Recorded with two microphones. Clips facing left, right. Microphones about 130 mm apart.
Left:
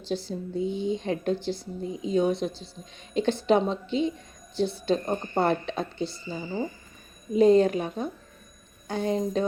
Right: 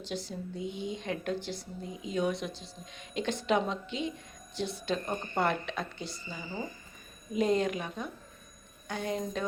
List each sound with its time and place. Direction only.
0.1 s a woman's voice: 30° left (ahead or behind)